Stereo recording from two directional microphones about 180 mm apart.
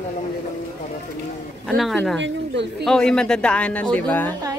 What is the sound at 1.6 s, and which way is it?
Speech, centre (ahead or behind).